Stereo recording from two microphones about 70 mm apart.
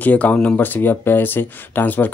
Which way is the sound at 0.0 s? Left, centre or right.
Left.